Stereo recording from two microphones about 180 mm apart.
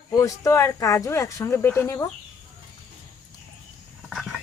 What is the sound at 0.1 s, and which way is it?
Speech, 20° left (ahead or behind).